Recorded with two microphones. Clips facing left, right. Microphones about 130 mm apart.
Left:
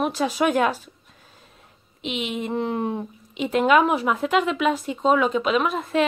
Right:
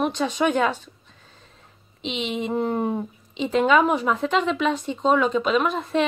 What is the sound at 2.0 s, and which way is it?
A woman's voice, 5° left (ahead or behind).